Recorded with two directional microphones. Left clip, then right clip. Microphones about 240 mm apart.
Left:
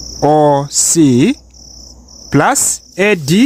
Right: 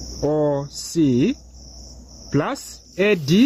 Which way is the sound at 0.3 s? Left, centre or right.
Left.